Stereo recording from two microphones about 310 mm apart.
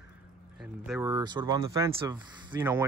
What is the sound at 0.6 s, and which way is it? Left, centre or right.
Speech, centre.